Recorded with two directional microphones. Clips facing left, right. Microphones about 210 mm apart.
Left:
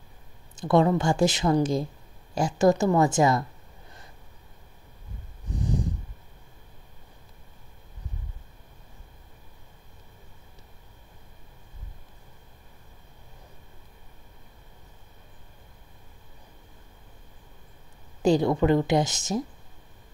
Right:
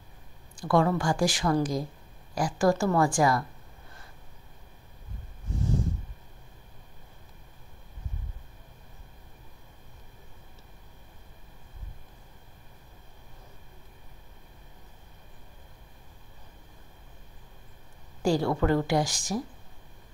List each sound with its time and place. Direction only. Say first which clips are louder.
0.6 s speech: left 3 dB; 20° left (ahead or behind)
5.5 s snort: left 1 dB; 15° left (ahead or behind)
18.2 s speech: left 4 dB; 20° left (ahead or behind)